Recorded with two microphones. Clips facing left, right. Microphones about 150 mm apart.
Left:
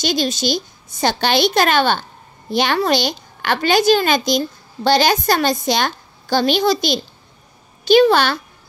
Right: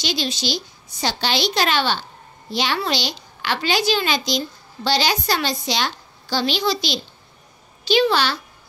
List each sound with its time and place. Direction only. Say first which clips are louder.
0.0 s a woman's voice: left 6 dB; 45° left (ahead or behind)